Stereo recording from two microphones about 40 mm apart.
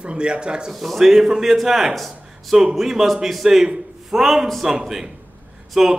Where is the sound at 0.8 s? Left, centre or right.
Centre.